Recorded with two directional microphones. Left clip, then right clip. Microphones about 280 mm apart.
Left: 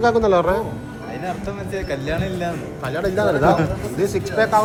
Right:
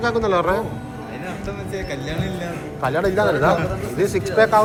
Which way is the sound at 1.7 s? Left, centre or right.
Left.